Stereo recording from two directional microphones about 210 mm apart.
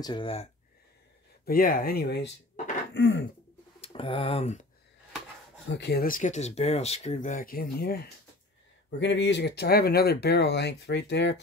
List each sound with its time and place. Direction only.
0.0 s speech: 20° left (ahead or behind)
1.4 s speech: 45° left (ahead or behind)
2.5 s a sound: 35° left (ahead or behind)
2.9 s throat clearing: 55° left (ahead or behind)
3.8 s speech: 25° left (ahead or behind)
5.7 s speech: 55° left (ahead or behind)